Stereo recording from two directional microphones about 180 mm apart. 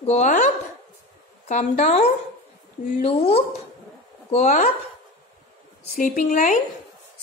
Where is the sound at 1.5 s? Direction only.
40° left (ahead or behind).